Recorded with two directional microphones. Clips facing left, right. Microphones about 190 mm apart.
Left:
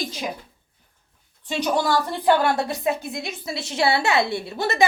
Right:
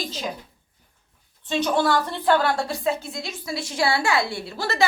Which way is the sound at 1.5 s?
10° left (ahead or behind).